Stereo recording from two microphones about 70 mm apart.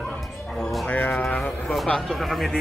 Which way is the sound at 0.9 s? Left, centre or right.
Left.